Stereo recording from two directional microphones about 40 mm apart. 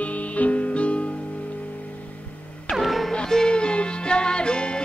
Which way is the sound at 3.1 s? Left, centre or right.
Centre.